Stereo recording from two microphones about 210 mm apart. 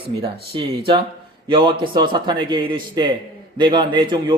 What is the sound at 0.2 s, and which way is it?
A man's voice, 25° right (ahead or behind).